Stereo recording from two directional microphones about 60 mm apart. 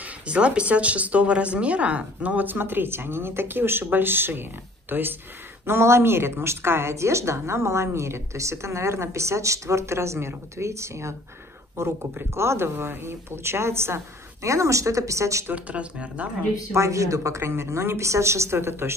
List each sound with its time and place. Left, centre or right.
0.0 s a woman's voice: centre; by 15.4 s right
15.5 s speech: right
16.7 s speech: right
17.4 s a woman's voice: right